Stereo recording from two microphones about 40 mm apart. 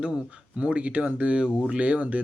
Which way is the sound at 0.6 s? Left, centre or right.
Right.